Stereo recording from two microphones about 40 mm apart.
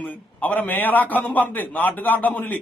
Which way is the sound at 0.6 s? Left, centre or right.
Left.